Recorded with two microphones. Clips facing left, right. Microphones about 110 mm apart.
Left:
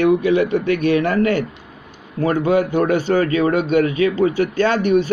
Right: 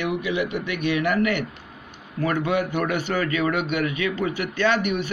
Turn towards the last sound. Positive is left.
turn(degrees=35)  # may be behind; listen again after turning